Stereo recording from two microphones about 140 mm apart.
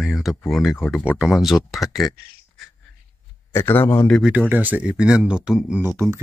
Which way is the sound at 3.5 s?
15° left (ahead or behind).